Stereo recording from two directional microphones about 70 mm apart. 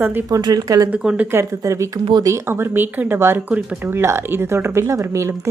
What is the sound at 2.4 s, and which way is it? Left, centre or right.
Speech, right.